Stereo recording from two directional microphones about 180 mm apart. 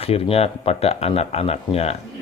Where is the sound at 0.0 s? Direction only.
35° left (ahead or behind).